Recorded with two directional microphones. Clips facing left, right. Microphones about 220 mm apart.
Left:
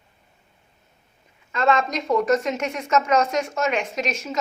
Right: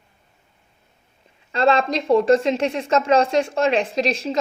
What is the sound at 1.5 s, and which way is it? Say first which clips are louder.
A woman's voice: right 3 dB; 30° right (ahead or behind).